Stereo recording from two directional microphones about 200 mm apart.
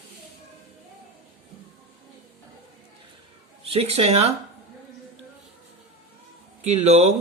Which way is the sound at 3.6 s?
30° right (ahead or behind).